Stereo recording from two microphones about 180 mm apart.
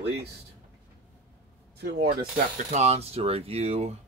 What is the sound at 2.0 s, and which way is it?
Speech, 50° right (ahead or behind).